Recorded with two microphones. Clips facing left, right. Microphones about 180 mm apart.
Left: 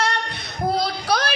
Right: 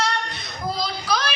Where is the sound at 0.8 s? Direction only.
55° left (ahead or behind).